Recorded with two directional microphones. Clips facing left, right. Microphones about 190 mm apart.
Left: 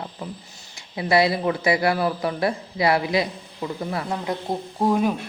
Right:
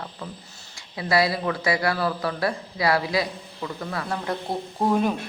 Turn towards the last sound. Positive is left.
turn(degrees=5)  # may be behind; listen again after turning